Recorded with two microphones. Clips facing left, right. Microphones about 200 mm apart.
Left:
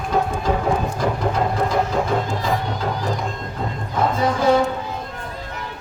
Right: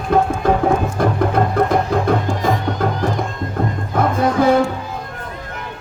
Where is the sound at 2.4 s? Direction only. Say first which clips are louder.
Right 4 dB; 55° right (ahead or behind).